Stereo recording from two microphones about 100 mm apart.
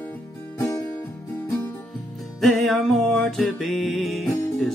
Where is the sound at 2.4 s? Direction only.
Centre (ahead or behind).